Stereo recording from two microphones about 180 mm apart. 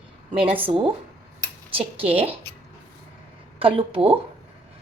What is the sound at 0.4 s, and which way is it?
Speech, 10° right (ahead or behind).